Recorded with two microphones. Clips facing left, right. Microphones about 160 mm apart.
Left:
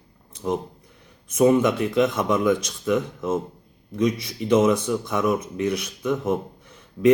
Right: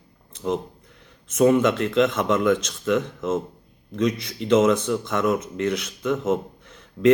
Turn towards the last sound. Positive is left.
turn(degrees=10)  # may be behind; listen again after turning